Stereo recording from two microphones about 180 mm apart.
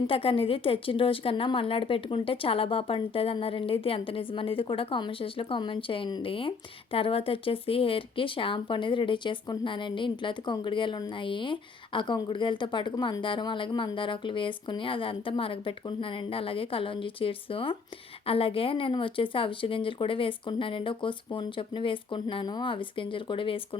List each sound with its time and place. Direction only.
0.1 s speech: 30° left (ahead or behind)